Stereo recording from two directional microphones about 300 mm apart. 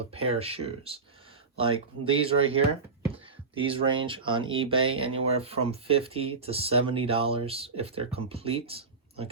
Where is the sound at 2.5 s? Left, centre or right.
Centre.